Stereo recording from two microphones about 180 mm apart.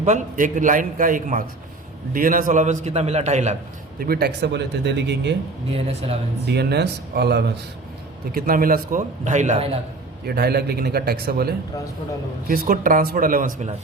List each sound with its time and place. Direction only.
0.0 s a man's voice: 45° right (ahead or behind)
4.0 s speech: 60° right (ahead or behind)
5.7 s a man's voice: 35° right (ahead or behind)
6.4 s a man's voice: 65° right (ahead or behind)
8.3 s a man's voice: 55° right (ahead or behind)
10.2 s a man's voice: 60° right (ahead or behind)